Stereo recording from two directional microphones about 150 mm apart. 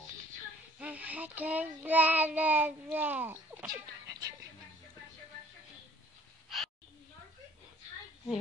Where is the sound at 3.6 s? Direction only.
25° right (ahead or behind).